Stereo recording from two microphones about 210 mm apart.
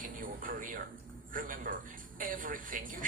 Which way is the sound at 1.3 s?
40° right (ahead or behind).